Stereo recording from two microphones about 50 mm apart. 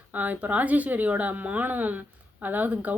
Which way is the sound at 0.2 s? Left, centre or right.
Right.